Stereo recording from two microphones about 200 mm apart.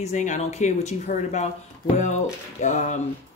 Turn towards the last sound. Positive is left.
turn(degrees=35)  # may be behind; listen again after turning